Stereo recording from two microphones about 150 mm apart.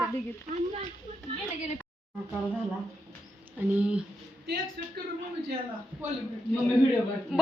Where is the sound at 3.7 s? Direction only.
10° right (ahead or behind).